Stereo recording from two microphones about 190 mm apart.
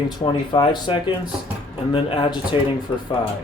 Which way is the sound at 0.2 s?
25° left (ahead or behind).